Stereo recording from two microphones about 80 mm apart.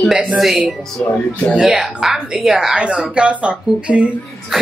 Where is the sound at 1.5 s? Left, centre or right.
Centre.